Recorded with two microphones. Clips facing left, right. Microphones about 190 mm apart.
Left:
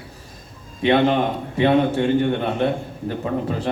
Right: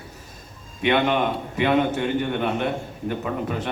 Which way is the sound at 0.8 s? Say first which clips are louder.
Left 3 dB; 35° left (ahead or behind).